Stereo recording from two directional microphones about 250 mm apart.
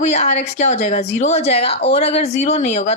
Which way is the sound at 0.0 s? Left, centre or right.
Left.